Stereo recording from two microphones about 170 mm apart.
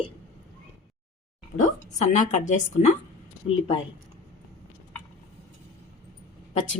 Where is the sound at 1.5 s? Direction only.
45° left (ahead or behind).